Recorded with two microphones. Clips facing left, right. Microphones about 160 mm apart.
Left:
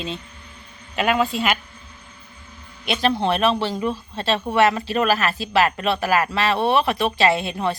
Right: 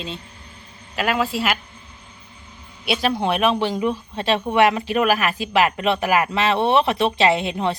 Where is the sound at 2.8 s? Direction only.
10° right (ahead or behind).